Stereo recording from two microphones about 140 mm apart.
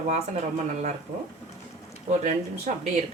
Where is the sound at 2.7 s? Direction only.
65° right (ahead or behind).